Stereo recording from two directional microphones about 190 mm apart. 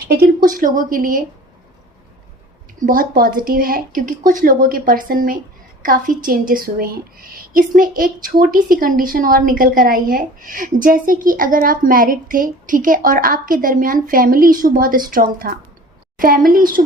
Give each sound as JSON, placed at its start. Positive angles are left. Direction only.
{"t": 0.5, "sound": "a woman's voice", "side_deg": -45}
{"t": 2.8, "sound": "a woman's voice", "side_deg": -50}